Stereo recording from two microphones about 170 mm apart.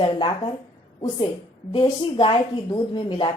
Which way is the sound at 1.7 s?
30° left (ahead or behind).